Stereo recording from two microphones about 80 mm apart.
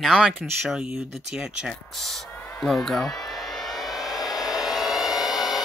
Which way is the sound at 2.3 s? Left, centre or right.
Left.